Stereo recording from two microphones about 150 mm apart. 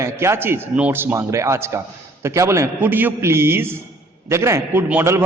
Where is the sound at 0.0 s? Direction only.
20° right (ahead or behind).